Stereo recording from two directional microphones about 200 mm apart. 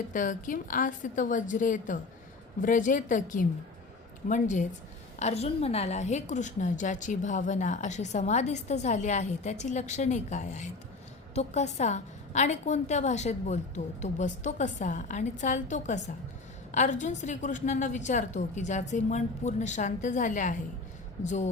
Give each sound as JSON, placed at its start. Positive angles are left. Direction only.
{"t": 0.1, "sound": "a woman's voice", "side_deg": 40}